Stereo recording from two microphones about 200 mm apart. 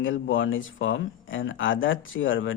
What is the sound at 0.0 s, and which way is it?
Speech, 75° left (ahead or behind).